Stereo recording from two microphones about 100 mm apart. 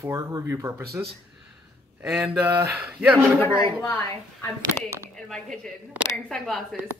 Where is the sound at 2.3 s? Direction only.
20° right (ahead or behind).